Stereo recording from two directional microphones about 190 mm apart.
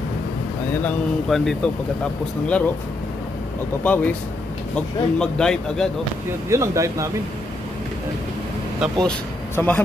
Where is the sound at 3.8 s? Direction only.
10° left (ahead or behind).